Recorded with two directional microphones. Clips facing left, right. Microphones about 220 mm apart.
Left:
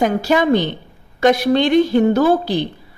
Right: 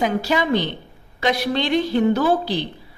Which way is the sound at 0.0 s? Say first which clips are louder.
Left 5 dB; 50° left (ahead or behind).